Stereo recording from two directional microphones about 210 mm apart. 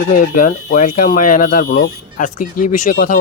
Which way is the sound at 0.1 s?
40° left (ahead or behind).